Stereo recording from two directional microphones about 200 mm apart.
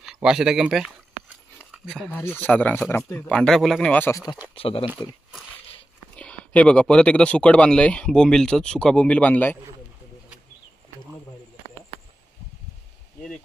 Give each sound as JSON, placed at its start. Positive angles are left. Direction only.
{"t": 0.0, "sound": "speech", "side_deg": -5}
{"t": 4.6, "sound": "speech", "side_deg": 25}
{"t": 6.1, "sound": "speech", "side_deg": 5}